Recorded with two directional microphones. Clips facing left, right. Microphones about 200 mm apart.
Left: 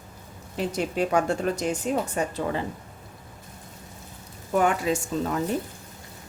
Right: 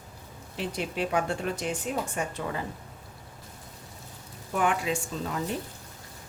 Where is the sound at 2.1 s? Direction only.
30° left (ahead or behind).